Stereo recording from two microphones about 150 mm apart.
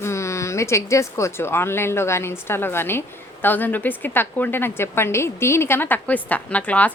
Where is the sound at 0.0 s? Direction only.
20° left (ahead or behind).